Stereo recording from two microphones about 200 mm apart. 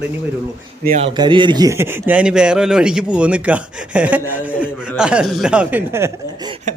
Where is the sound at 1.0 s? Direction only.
25° right (ahead or behind).